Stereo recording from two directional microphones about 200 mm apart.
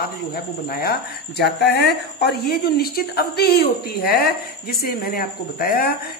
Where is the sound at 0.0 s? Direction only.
50° left (ahead or behind).